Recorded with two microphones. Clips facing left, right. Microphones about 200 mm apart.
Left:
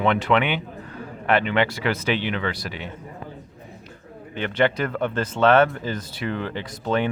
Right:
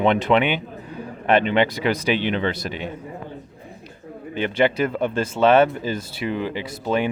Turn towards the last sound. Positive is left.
turn(degrees=-10)  # may be behind; listen again after turning